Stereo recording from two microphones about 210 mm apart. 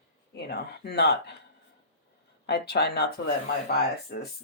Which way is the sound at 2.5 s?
50° left (ahead or behind).